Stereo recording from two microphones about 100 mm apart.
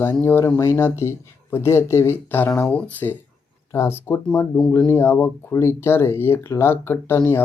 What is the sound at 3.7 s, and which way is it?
Speech, 30° left (ahead or behind).